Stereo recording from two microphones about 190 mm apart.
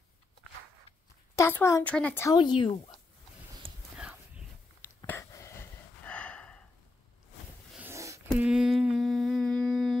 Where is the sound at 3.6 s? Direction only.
30° right (ahead or behind).